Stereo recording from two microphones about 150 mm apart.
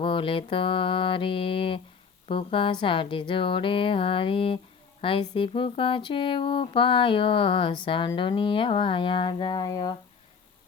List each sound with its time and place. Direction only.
0.0 s speech: 35° left (ahead or behind)